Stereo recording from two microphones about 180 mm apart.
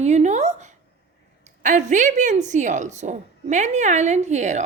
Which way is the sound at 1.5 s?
40° right (ahead or behind).